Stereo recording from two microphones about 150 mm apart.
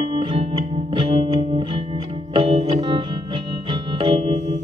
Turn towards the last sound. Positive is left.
turn(degrees=-50)  # may be behind; listen again after turning